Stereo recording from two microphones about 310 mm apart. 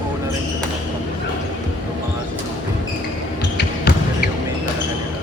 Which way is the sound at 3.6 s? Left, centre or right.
Left.